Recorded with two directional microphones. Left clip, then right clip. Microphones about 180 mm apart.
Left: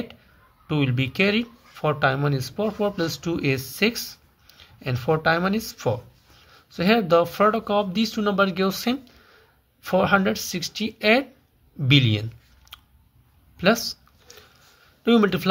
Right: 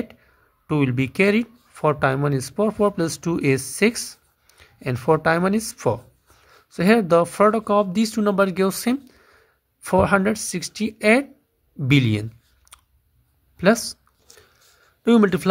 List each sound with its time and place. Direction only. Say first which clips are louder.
0.7 s speech: right 3 dB; 45° right (ahead or behind)
13.6 s a sound: right 2 dB; 40° right (ahead or behind)
15.0 s speech: right 2 dB; 40° right (ahead or behind)